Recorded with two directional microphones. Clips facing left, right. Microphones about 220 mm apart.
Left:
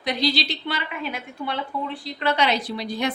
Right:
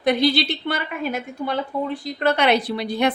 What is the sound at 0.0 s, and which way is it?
A woman's voice, 55° right (ahead or behind).